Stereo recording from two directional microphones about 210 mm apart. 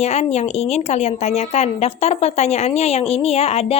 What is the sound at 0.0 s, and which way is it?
Speech, 30° left (ahead or behind).